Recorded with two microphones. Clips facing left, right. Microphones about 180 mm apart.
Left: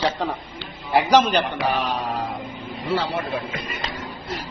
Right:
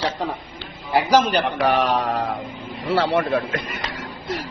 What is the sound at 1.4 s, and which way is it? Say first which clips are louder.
Speech: right 4 dB; 70° right (ahead or behind).